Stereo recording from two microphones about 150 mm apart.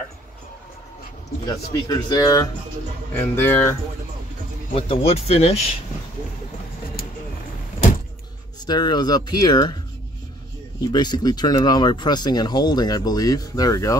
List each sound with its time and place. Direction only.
1.4 s speech: 25° left (ahead or behind)
3.2 s speech: 15° left (ahead or behind)
4.7 s speech: 40° left (ahead or behind)
8.5 s speech: 30° left (ahead or behind)
10.8 s speech: 30° left (ahead or behind)